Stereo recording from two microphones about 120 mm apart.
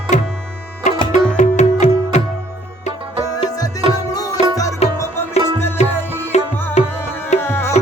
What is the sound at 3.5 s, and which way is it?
Music, 30° left (ahead or behind).